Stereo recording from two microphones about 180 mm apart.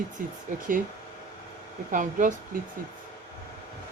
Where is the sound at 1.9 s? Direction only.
45° right (ahead or behind).